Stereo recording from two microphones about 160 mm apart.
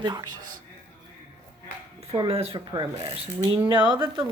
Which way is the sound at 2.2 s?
40° right (ahead or behind).